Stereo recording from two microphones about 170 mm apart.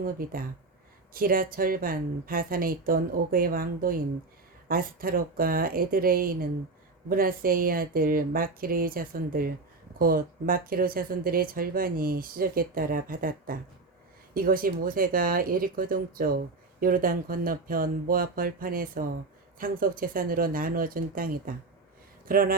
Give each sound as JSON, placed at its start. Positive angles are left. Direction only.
{"t": 0.0, "sound": "speech", "side_deg": -60}